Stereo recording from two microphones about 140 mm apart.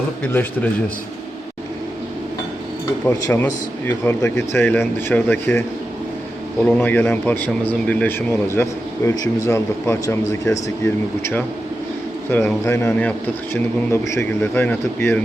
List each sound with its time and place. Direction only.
0.2 s speech: 10° left (ahead or behind)
3.2 s speech: 20° left (ahead or behind)
6.7 s speech: 10° left (ahead or behind)
12.6 s speech: 20° left (ahead or behind)